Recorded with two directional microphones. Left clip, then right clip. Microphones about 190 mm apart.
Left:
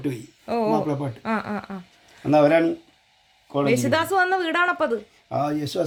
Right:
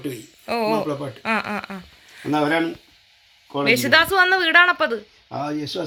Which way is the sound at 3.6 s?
5° left (ahead or behind).